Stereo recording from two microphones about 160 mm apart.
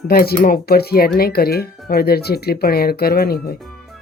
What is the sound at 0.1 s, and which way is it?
Speech, 70° left (ahead or behind).